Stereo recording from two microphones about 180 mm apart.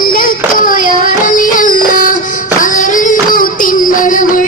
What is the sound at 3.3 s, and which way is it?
Child singing, 50° left (ahead or behind).